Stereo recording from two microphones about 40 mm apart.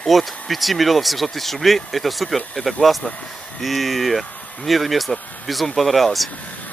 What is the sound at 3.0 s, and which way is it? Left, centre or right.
Speech, centre.